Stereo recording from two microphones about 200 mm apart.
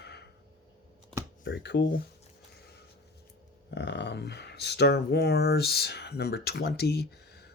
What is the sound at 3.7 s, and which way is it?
Speech, 60° left (ahead or behind).